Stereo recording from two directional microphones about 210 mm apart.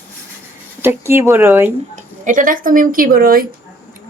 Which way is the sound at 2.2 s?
40° right (ahead or behind).